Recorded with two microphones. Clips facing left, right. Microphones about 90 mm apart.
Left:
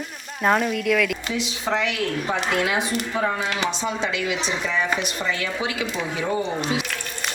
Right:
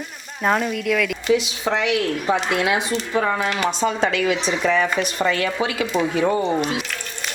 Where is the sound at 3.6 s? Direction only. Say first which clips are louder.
Right 4 dB; 45° right (ahead or behind).